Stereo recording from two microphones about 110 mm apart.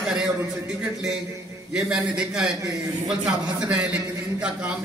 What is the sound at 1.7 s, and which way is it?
A man's voice, 5° right (ahead or behind).